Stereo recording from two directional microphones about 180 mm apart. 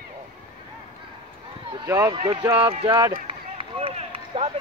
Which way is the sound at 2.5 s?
30° right (ahead or behind).